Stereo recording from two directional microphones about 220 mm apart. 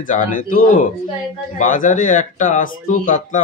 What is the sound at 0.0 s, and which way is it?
Speech, 35° left (ahead or behind).